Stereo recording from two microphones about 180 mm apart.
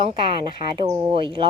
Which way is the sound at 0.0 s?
30° right (ahead or behind).